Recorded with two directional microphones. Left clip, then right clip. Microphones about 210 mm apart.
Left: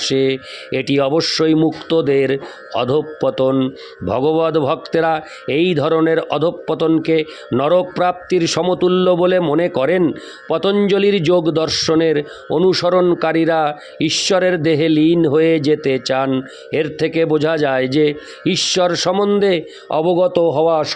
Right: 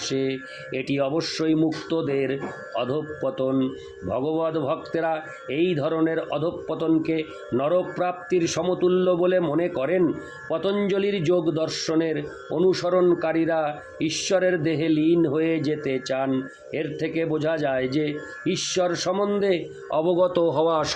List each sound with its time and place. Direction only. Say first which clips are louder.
0.0 s a man's voice: left 10 dB; 50° left (ahead or behind); by 20.9 s 25° left (ahead or behind)